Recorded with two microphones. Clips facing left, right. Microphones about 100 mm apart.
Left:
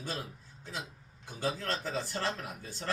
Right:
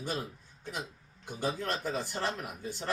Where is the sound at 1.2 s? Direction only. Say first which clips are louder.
Right 1 dB; 15° right (ahead or behind).